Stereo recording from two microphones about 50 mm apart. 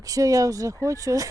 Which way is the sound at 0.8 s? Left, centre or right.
Right.